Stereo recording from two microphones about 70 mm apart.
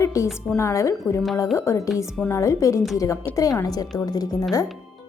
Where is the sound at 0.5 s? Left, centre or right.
Left.